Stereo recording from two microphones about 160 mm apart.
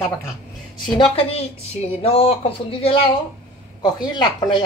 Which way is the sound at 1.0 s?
35° left (ahead or behind).